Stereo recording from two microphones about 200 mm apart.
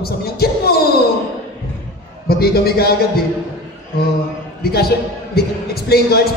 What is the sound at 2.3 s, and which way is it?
Speech, 50° left (ahead or behind).